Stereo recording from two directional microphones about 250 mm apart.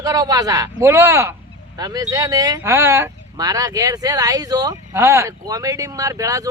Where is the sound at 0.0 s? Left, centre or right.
Centre.